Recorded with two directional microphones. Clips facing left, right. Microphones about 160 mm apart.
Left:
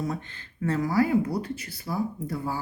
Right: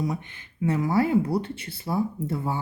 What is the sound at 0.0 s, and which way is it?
A woman's voice, 15° right (ahead or behind).